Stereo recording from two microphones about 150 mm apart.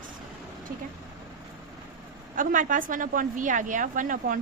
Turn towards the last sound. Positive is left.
turn(degrees=-60)  # may be behind; listen again after turning